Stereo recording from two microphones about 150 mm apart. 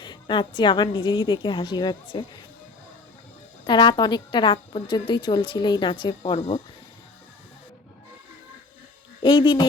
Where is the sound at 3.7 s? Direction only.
30° left (ahead or behind).